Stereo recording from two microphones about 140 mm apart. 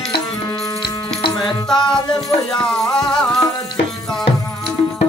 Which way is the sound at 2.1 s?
5° left (ahead or behind).